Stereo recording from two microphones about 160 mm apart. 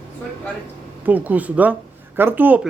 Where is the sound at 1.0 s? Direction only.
10° right (ahead or behind).